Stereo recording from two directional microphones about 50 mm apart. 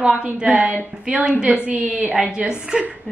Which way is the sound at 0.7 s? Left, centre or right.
Right.